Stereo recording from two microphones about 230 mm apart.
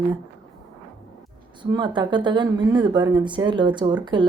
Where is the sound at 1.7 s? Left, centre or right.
Right.